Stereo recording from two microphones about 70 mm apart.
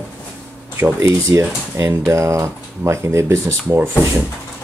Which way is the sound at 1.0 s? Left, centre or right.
Right.